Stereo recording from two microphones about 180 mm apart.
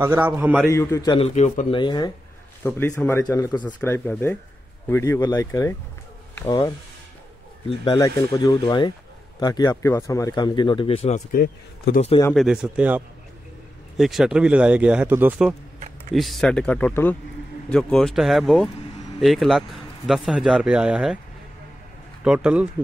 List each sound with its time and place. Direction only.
0.0 s a man's voice: 10° right (ahead or behind)
0.7 s speech: 15° left (ahead or behind)
1.1 s speech: 35° left (ahead or behind)
1.8 s speech: 25° left (ahead or behind)
7.9 s speech: 20° left (ahead or behind); by 11.2 s 35° left (ahead or behind)
11.3 s a man's voice: 60° left (ahead or behind)
12.4 s speech: 5° right (ahead or behind)
22.2 s a man's voice: 5° right (ahead or behind)